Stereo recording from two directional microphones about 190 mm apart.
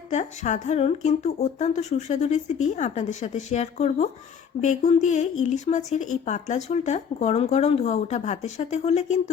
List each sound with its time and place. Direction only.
0.1 s speech: 40° left (ahead or behind)